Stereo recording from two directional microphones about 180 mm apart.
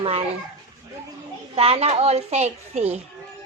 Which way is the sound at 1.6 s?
35° right (ahead or behind).